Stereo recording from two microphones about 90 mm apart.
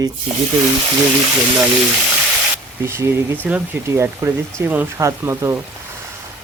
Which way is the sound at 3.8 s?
30° right (ahead or behind).